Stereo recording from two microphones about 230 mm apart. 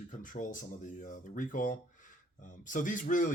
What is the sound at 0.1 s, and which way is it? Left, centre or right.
Speech, left.